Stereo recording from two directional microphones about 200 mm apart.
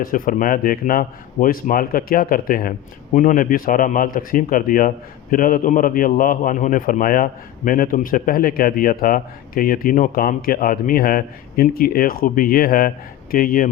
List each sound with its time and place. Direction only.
0.0 s a man's voice: 45° left (ahead or behind)